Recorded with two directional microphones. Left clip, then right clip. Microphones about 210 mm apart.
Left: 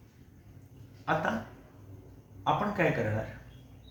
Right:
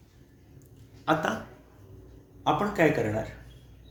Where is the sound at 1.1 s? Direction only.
60° right (ahead or behind).